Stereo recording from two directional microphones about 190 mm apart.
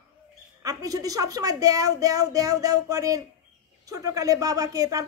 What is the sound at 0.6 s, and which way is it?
A woman's voice, 20° right (ahead or behind).